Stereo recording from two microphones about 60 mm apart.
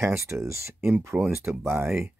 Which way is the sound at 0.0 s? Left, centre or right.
Right.